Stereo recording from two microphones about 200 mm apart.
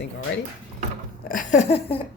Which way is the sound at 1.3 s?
40° left (ahead or behind).